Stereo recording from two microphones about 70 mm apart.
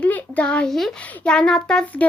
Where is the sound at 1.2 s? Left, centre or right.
Centre.